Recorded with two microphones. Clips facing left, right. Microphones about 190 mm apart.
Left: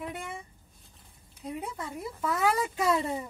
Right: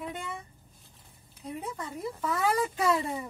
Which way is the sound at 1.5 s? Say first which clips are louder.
Left 1 dB; 10° left (ahead or behind).